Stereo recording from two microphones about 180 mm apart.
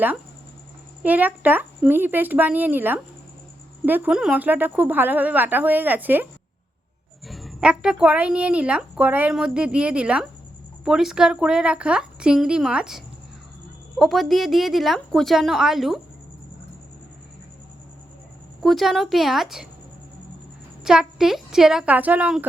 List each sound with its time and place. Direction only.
1.0 s speech: 10° right (ahead or behind)
7.3 s a woman's voice: centre (ahead or behind)
14.0 s a woman's voice: centre (ahead or behind)
18.6 s a woman's voice: centre (ahead or behind)
20.8 s a woman's voice: 5° right (ahead or behind)